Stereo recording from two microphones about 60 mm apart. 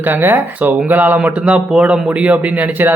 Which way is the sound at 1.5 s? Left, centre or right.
Centre.